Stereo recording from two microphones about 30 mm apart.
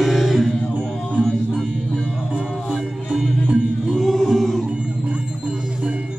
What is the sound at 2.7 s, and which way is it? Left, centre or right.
Music, right.